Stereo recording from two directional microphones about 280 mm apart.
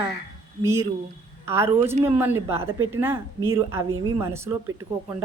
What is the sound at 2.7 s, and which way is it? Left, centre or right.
Speech, right.